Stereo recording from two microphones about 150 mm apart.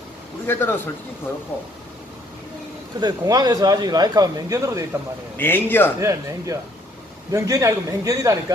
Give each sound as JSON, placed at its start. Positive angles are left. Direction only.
{"t": 0.5, "sound": "a man's voice", "side_deg": 15}
{"t": 3.0, "sound": "speech", "side_deg": -25}
{"t": 5.4, "sound": "a man's voice", "side_deg": 15}
{"t": 5.9, "sound": "speech", "side_deg": -20}